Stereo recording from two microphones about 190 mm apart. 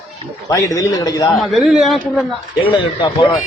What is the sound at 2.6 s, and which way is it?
Speech, 25° left (ahead or behind).